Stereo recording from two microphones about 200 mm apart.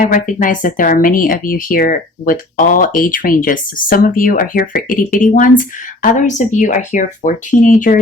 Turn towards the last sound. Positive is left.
turn(degrees=40)  # may be behind; listen again after turning